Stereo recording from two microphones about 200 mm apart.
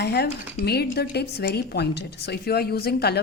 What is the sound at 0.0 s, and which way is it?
A woman's voice, 55° left (ahead or behind).